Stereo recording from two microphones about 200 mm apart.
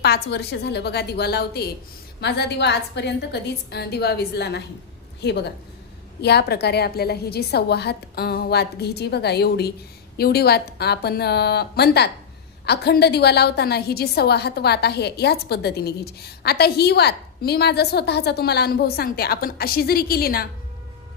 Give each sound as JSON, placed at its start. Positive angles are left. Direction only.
{"t": 0.0, "sound": "a woman's voice", "side_deg": 55}